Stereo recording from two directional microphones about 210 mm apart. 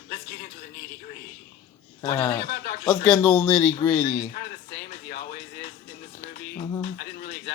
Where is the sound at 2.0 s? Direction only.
10° left (ahead or behind).